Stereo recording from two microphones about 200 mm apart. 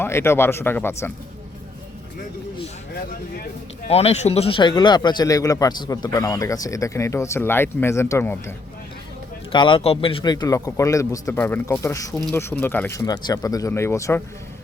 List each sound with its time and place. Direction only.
0.0 s a man's voice: 10° left (ahead or behind)
3.8 s a man's voice: 30° left (ahead or behind); by 8.5 s 10° left (ahead or behind)
9.5 s a man's voice: 25° left (ahead or behind)